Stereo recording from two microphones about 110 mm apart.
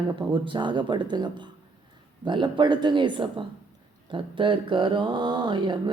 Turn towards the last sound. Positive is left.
turn(degrees=-45)  # may be behind; listen again after turning